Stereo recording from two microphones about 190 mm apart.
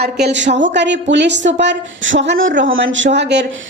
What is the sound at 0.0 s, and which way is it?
A woman's voice, 60° right (ahead or behind).